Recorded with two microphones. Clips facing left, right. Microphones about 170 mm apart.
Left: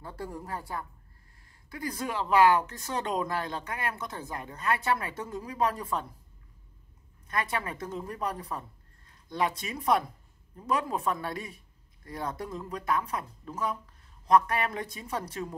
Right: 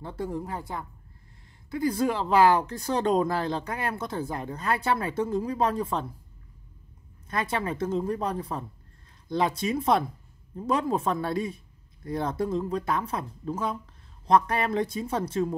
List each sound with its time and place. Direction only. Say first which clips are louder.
0.0 s speech: right 6 dB; 20° right (ahead or behind)
7.2 s speech: right 4 dB; 30° right (ahead or behind)